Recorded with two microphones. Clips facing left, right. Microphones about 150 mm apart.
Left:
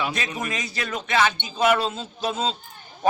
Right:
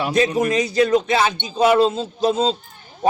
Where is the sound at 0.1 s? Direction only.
40° right (ahead or behind).